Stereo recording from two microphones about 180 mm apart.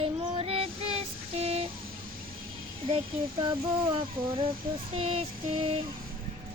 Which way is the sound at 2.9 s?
30° right (ahead or behind).